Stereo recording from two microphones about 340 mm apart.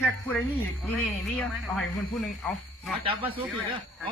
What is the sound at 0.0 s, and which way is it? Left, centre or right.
Speech, centre.